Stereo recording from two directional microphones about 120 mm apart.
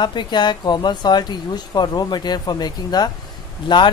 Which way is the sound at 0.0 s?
40° left (ahead or behind).